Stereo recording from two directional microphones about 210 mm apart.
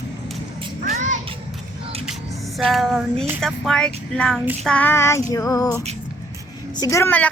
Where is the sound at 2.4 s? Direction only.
Centre (ahead or behind).